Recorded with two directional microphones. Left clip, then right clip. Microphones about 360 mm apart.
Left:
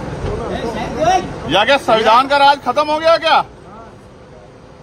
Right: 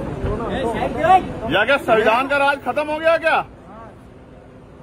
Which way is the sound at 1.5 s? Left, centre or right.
Centre.